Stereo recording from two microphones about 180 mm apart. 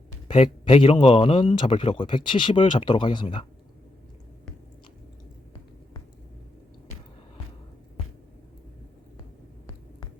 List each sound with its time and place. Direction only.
0.3 s a man's voice: 30° left (ahead or behind)